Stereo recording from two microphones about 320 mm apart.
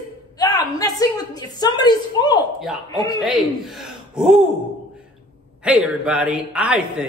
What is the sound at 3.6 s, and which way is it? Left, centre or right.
Gasp, centre.